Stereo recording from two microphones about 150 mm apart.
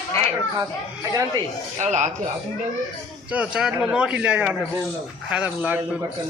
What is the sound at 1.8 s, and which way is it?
Speech, 50° right (ahead or behind).